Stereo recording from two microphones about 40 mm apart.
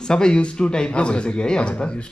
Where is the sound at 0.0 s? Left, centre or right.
Centre.